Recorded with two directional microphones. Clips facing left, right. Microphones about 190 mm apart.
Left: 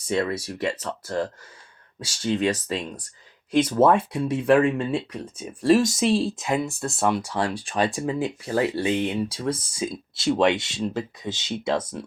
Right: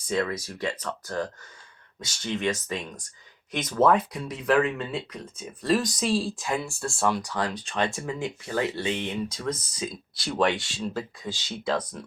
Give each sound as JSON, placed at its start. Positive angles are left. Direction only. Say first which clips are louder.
{"t": 0.1, "sound": "speech", "louder": "left 3 dB", "side_deg": 25}
{"t": 7.4, "sound": "speech", "louder": "left 3 dB", "side_deg": 10}
{"t": 7.7, "sound": "speech", "louder": "left 4 dB", "side_deg": 35}